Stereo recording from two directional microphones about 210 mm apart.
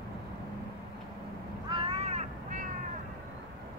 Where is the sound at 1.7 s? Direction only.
25° right (ahead or behind).